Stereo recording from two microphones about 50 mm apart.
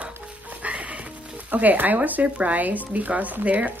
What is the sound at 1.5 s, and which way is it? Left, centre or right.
Speech, right.